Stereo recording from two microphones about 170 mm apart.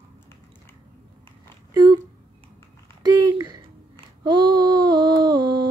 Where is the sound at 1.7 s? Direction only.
25° right (ahead or behind).